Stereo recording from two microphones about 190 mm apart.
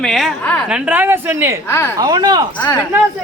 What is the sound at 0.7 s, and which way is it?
Speech, 10° right (ahead or behind).